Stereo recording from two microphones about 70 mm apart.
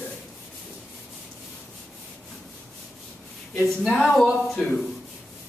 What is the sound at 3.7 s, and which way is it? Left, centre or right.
Speech, centre.